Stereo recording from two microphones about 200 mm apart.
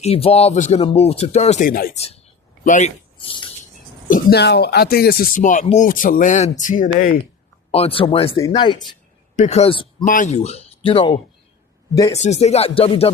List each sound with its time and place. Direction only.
0.0 s speech: 30° left (ahead or behind)
2.0 s speech: 30° left (ahead or behind)
3.2 s a sound: 25° left (ahead or behind)
4.1 s speech: 55° left (ahead or behind)
7.7 s speech: 30° left (ahead or behind)
9.3 s speech: 35° left (ahead or behind)